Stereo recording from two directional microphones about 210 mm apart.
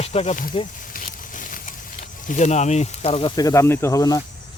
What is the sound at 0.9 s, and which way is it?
Patter, 40° left (ahead or behind).